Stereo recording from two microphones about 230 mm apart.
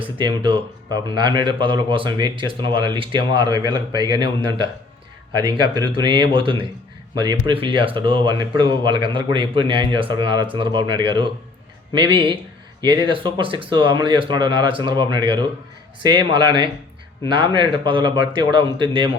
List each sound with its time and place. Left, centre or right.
0.0 s speech: right